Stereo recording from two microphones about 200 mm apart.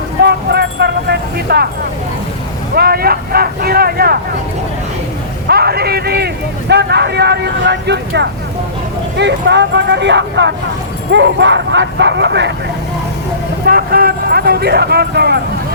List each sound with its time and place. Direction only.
0.2 s vehicle: 55° right (ahead or behind)
2.7 s speech: 50° right (ahead or behind)
5.5 s speech: 50° right (ahead or behind)
13.7 s speech: 50° right (ahead or behind)